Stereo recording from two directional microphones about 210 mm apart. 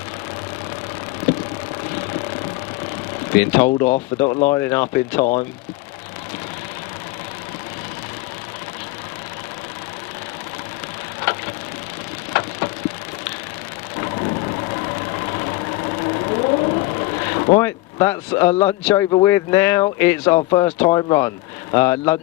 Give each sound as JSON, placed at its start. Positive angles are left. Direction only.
{"t": 3.3, "sound": "speech", "side_deg": 10}
{"t": 3.7, "sound": "speech", "side_deg": 35}
{"t": 4.5, "sound": "speech", "side_deg": 10}
{"t": 12.3, "sound": "a sound", "side_deg": 15}
{"t": 16.3, "sound": "vehicle", "side_deg": 25}
{"t": 17.6, "sound": "speech", "side_deg": 10}
{"t": 20.5, "sound": "speech", "side_deg": 25}
{"t": 20.7, "sound": "speech", "side_deg": 15}